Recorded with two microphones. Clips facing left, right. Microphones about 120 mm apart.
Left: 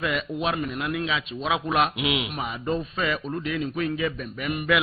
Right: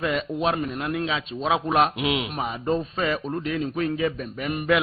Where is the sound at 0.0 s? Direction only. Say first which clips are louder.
Right 2 dB; 35° right (ahead or behind).